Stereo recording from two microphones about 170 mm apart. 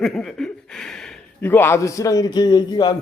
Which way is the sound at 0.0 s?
5° left (ahead or behind).